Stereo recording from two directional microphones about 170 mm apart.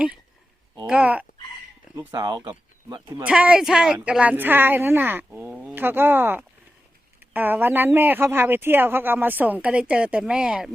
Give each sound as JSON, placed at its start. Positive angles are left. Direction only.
{"t": 0.9, "sound": "speech", "side_deg": -10}
{"t": 2.0, "sound": "speech", "side_deg": -20}
{"t": 3.2, "sound": "speech", "side_deg": -5}